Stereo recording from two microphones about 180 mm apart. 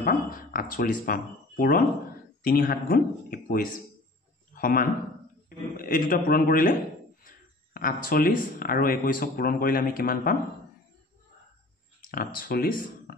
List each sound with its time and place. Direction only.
0.0 s a man's voice: 50° left (ahead or behind)
12.4 s speech: 50° left (ahead or behind)